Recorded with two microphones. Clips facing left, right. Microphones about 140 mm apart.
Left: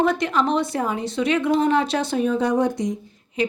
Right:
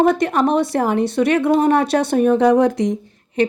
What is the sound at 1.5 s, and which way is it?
A woman's voice, 50° right (ahead or behind).